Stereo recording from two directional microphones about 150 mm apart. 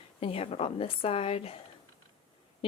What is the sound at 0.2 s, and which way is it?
A woman's voice, 40° left (ahead or behind).